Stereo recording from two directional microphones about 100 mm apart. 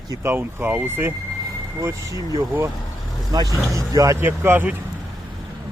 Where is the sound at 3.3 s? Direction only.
40° right (ahead or behind).